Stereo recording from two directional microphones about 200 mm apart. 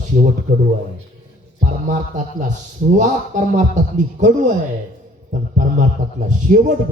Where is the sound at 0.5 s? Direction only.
35° right (ahead or behind).